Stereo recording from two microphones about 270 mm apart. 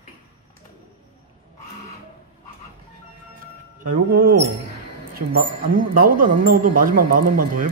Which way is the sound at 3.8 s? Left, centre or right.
Right.